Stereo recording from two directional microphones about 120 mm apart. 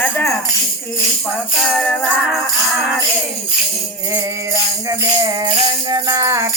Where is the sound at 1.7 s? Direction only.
10° left (ahead or behind).